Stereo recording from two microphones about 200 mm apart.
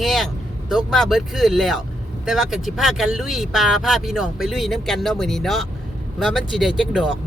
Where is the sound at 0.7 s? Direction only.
Centre (ahead or behind).